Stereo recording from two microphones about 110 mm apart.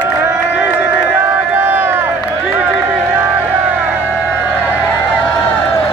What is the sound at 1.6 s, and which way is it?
Run, 20° right (ahead or behind).